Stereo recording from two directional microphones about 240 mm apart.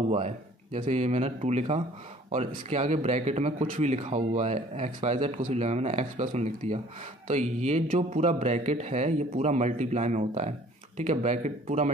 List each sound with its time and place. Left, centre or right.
0.7 s a man's voice: right